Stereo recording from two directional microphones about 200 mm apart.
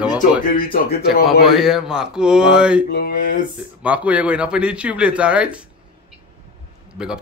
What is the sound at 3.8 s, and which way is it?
Speech, 5° right (ahead or behind).